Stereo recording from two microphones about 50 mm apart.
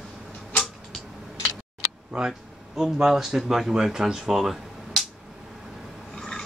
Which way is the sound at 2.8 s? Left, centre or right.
Centre.